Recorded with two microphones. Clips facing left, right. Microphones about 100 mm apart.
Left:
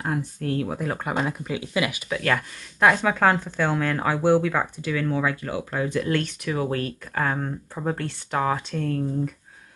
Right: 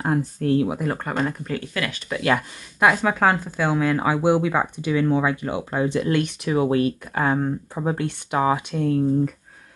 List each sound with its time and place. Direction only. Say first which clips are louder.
0.0 s speech: right 5 dB; 30° right (ahead or behind)
0.7 s speech: right 2 dB; centre (ahead or behind); by 2.0 s 15° left (ahead or behind)
2.2 s speech: right 4 dB; 10° right (ahead or behind)